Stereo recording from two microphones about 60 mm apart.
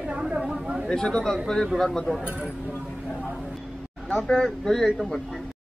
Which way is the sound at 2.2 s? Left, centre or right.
Right.